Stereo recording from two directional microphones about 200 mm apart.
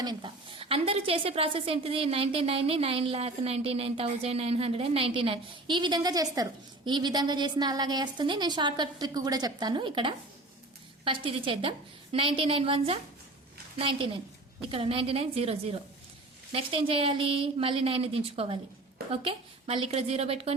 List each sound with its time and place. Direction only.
0.0 s a woman's voice: 20° right (ahead or behind)